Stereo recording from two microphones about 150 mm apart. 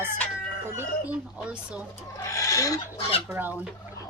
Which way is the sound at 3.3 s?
10° right (ahead or behind).